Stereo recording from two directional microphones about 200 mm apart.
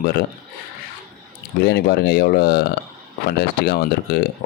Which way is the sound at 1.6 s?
55° left (ahead or behind).